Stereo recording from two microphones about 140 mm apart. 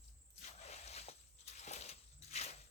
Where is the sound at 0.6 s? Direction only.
50° left (ahead or behind).